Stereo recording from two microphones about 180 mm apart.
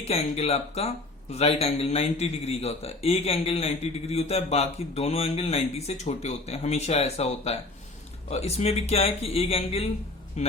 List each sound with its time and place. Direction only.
0.0 s a man's voice: 35° left (ahead or behind)